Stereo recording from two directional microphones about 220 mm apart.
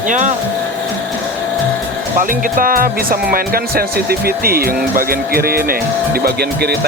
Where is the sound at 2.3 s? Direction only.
40° right (ahead or behind).